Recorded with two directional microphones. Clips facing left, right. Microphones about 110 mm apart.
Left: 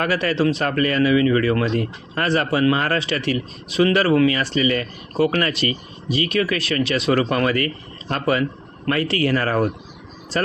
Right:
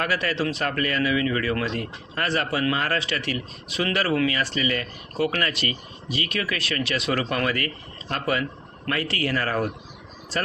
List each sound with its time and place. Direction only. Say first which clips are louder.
0.0 s speech: left 6 dB; 30° left (ahead or behind)